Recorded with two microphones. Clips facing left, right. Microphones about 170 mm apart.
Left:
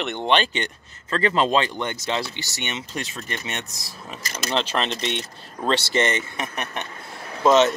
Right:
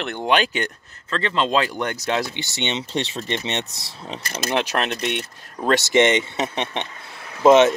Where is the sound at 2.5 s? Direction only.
25° right (ahead or behind).